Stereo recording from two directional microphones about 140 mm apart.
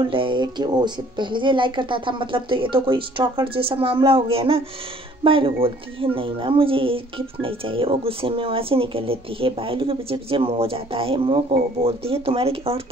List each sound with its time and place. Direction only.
0.0 s speech: 35° right (ahead or behind)